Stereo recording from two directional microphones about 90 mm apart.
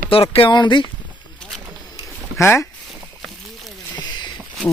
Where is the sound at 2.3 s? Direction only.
35° left (ahead or behind).